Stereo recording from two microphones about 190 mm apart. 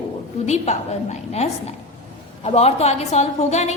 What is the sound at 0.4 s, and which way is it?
Speech, 35° left (ahead or behind).